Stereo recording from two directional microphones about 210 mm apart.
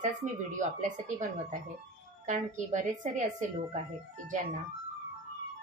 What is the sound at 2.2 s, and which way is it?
A woman's voice, 35° right (ahead or behind).